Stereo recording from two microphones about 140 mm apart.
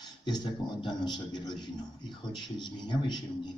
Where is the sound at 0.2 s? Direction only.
30° left (ahead or behind).